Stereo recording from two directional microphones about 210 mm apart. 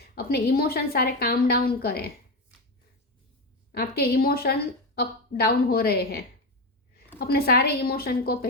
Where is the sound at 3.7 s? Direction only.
50° left (ahead or behind).